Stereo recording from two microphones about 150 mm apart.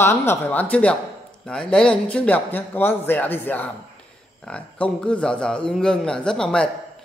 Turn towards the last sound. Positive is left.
turn(degrees=5)  # may be behind; listen again after turning